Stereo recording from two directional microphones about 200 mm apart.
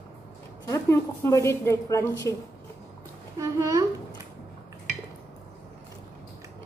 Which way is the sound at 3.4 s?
15° right (ahead or behind).